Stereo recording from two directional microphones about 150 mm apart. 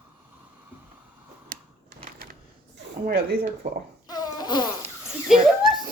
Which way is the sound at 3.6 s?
50° right (ahead or behind).